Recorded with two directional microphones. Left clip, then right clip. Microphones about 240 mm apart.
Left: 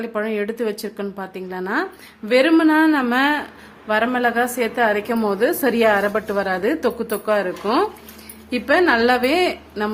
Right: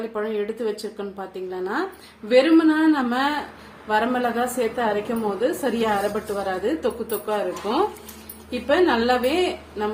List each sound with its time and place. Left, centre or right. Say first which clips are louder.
0.1 s a woman's voice: left 3 dB; left